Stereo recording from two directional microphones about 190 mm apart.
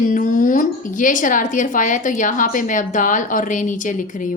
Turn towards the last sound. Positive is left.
turn(degrees=45)  # may be behind; listen again after turning